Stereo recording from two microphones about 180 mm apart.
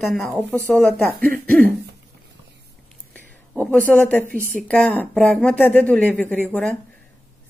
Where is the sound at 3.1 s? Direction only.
10° left (ahead or behind).